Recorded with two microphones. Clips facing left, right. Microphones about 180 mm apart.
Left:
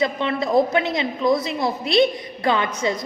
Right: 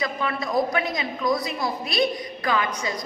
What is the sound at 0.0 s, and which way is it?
A woman's voice, 25° left (ahead or behind).